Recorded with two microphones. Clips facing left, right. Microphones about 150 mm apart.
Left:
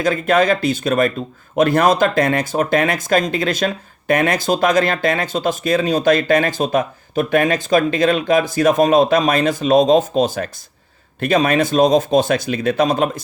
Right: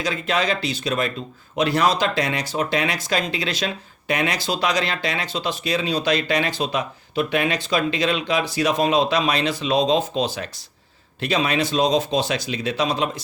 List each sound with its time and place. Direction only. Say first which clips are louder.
0.0 s speech: left 8 dB; 50° left (ahead or behind)